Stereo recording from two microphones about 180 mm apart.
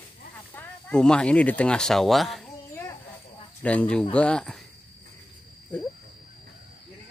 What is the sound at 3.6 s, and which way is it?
Speech, 5° left (ahead or behind).